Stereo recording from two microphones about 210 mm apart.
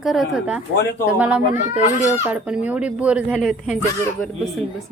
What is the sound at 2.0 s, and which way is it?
Speech, 10° right (ahead or behind).